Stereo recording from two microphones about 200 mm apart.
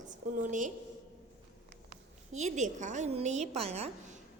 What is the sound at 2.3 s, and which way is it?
A woman's voice, 35° right (ahead or behind).